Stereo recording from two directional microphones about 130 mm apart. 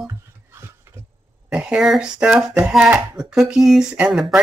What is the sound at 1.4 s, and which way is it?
Speech, 5° right (ahead or behind).